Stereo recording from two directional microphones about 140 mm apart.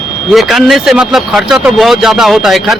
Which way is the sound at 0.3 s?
Centre (ahead or behind).